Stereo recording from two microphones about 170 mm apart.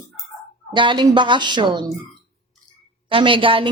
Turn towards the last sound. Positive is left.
turn(degrees=-30)  # may be behind; listen again after turning